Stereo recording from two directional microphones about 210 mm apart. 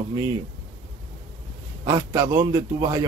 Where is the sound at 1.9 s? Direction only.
15° right (ahead or behind).